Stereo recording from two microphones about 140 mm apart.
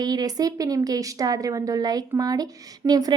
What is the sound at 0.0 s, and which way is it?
Speech, 30° right (ahead or behind).